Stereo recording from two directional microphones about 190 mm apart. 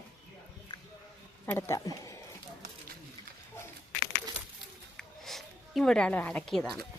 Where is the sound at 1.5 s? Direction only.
10° left (ahead or behind).